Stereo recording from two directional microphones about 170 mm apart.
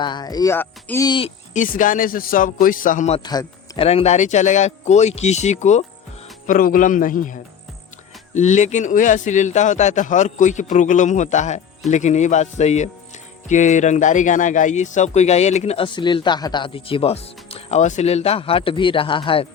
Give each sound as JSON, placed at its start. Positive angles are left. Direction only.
{"t": 0.0, "sound": "speech", "side_deg": 25}
{"t": 1.0, "sound": "speech", "side_deg": 30}
{"t": 1.5, "sound": "speech", "side_deg": 50}
{"t": 3.2, "sound": "a man's voice", "side_deg": 25}
{"t": 3.8, "sound": "speech", "side_deg": 40}
{"t": 6.5, "sound": "speech", "side_deg": 55}